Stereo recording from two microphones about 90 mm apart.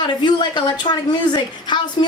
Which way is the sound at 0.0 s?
55° left (ahead or behind).